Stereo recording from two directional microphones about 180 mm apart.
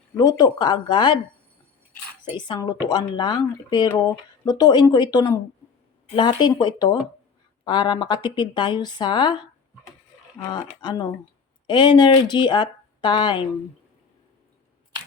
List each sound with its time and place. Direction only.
0.1 s speech: 20° left (ahead or behind)
2.4 s speech: 25° left (ahead or behind)